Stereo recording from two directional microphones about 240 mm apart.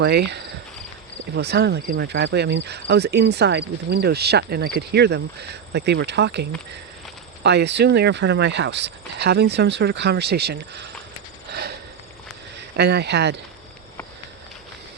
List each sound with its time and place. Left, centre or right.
0.0 s cricket: right
12.7 s cricket: right